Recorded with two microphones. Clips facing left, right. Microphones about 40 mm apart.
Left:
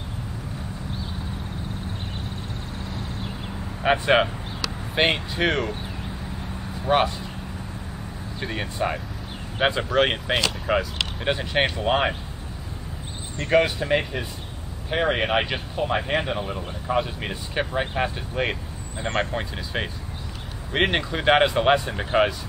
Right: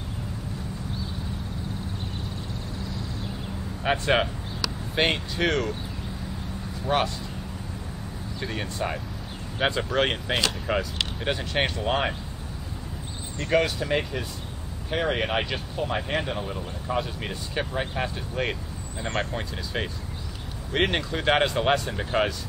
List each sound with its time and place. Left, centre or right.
3.8 s speech: centre
6.9 s speech: centre
8.4 s speech: centre
13.5 s speech: centre